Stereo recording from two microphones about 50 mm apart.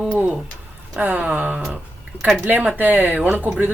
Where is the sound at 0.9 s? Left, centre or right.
Right.